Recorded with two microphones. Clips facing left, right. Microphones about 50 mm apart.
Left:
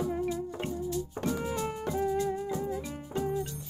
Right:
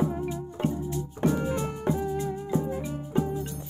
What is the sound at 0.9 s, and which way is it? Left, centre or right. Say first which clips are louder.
Music: right 5 dB; right.